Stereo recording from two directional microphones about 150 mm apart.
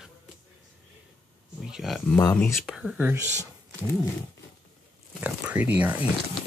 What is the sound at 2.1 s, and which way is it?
Speech, 20° left (ahead or behind).